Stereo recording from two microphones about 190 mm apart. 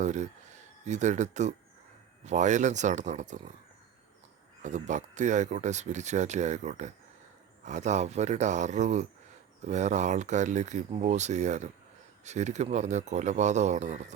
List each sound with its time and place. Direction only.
0.0 s speech: 40° right (ahead or behind)
4.6 s speech: 40° right (ahead or behind)